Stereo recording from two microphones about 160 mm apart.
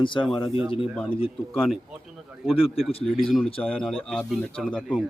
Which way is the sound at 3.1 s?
Centre (ahead or behind).